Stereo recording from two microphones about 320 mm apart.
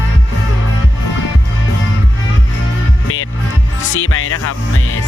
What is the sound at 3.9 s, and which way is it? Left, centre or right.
Music, left.